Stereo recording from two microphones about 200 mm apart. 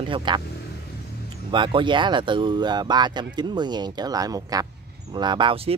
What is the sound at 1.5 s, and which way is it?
Speech, 25° right (ahead or behind).